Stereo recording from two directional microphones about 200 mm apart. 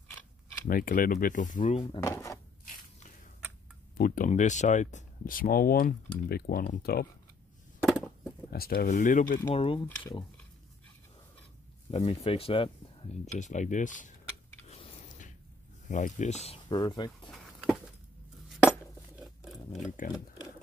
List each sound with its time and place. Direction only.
0.7 s speech: 45° left (ahead or behind)
2.0 s speech: 15° left (ahead or behind)
4.0 s speech: 45° left (ahead or behind)
7.8 s a sound: centre (ahead or behind)
8.5 s speech: 50° left (ahead or behind)
9.5 s speech: 25° left (ahead or behind)
11.9 s speech: 30° left (ahead or behind)
14.7 s a sound: 30° left (ahead or behind)
15.9 s speech: 40° left (ahead or behind); by 17.3 s 20° left (ahead or behind)
19.1 s rub: centre (ahead or behind)
20.0 s speech: 40° left (ahead or behind)